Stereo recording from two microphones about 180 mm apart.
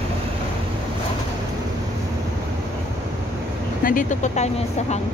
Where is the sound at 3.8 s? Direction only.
50° left (ahead or behind).